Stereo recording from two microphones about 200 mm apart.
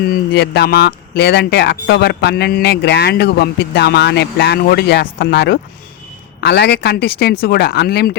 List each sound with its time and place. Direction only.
0.1 s speech: 55° left (ahead or behind)